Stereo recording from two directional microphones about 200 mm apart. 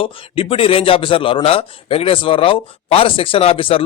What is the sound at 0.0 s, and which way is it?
A man's voice, 25° left (ahead or behind).